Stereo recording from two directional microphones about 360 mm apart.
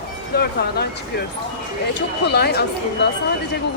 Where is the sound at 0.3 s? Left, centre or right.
Left.